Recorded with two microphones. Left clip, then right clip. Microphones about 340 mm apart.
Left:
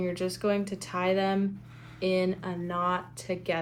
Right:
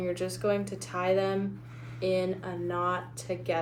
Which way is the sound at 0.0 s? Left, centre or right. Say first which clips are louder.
Left 1 dB; centre.